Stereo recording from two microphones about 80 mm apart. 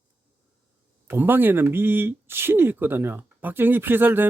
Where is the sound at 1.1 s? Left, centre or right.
Right.